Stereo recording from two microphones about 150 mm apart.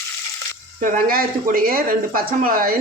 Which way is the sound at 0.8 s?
70° right (ahead or behind).